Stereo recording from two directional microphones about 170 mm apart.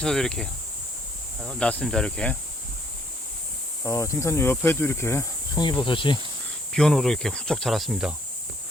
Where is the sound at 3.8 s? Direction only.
15° left (ahead or behind).